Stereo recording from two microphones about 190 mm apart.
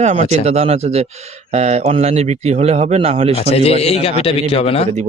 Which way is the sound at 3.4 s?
30° left (ahead or behind).